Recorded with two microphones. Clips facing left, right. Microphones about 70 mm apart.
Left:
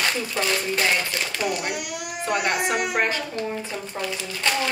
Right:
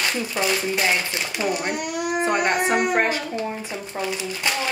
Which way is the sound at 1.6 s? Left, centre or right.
Right.